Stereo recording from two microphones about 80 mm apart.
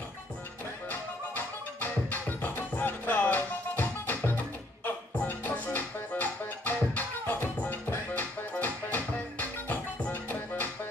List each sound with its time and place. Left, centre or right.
0.8 s music: left